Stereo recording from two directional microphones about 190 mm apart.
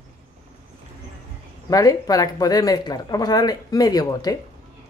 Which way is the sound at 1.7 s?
20° left (ahead or behind).